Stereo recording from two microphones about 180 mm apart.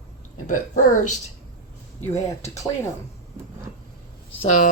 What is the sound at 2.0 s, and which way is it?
Speech, 15° left (ahead or behind).